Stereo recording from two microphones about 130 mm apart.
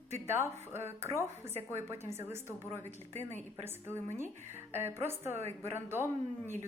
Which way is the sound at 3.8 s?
20° right (ahead or behind).